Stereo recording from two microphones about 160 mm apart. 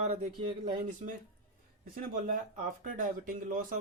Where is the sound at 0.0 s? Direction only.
45° right (ahead or behind).